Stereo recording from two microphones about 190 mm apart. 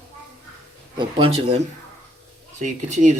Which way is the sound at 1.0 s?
25° right (ahead or behind).